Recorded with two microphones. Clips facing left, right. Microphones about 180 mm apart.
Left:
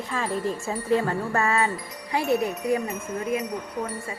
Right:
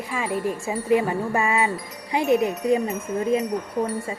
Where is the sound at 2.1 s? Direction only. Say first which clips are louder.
Right 4 dB; 15° right (ahead or behind).